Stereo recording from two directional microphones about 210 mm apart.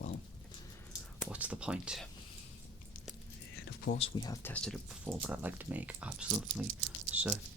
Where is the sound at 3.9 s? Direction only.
30° left (ahead or behind).